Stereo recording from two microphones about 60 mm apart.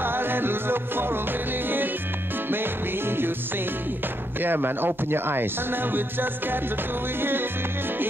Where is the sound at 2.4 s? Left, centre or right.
Right.